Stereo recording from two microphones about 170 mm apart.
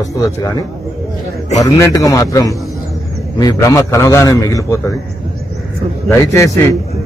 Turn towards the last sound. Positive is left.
turn(degrees=20)  # may be behind; listen again after turning